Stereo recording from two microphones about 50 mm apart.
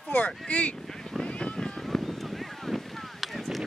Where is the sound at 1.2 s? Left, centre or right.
Left.